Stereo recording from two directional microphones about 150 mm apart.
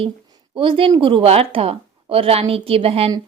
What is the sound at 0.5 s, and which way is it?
A woman's voice, 35° right (ahead or behind).